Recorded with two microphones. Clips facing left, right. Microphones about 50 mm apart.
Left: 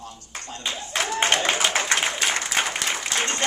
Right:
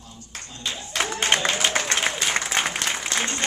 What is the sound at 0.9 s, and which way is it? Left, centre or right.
Speech, left.